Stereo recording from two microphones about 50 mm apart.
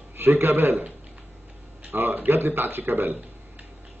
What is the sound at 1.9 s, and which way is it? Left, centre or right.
A man's voice, right.